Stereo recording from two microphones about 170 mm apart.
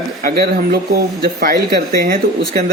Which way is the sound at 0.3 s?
60° right (ahead or behind).